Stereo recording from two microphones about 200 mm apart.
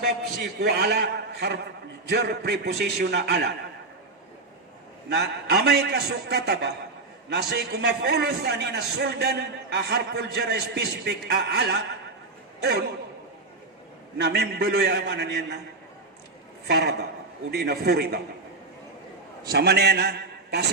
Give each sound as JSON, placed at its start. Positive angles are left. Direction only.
{"t": 0.0, "sound": "a man's voice", "side_deg": -55}
{"t": 5.0, "sound": "a man's voice", "side_deg": -55}
{"t": 14.2, "sound": "a man's voice", "side_deg": -60}
{"t": 16.6, "sound": "a man's voice", "side_deg": -55}
{"t": 19.5, "sound": "a man's voice", "side_deg": -55}